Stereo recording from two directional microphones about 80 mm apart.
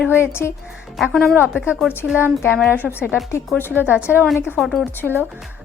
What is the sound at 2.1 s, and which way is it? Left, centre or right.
Speech, left.